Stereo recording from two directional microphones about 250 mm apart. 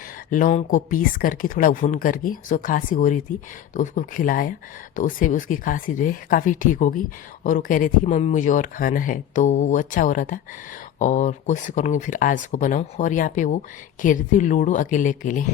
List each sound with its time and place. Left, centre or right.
0.3 s speech: left